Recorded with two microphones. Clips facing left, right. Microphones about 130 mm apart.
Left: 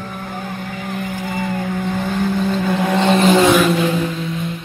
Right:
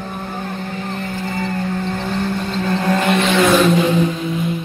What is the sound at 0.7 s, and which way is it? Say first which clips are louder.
Vehicle: even; 10° left (ahead or behind).